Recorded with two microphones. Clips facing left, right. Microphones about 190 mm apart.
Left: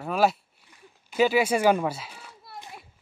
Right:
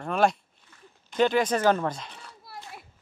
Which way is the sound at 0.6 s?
5° left (ahead or behind).